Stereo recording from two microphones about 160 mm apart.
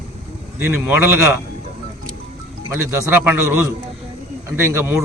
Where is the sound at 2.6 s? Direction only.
15° right (ahead or behind).